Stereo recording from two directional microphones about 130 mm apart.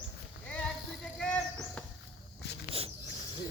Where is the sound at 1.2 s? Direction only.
5° left (ahead or behind).